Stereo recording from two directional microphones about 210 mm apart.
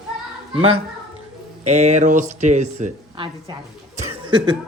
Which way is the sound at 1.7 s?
35° right (ahead or behind).